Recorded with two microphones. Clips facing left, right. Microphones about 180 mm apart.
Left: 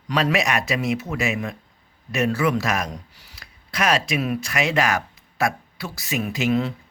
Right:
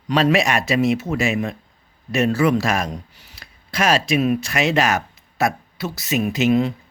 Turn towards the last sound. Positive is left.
turn(degrees=-15)  # may be behind; listen again after turning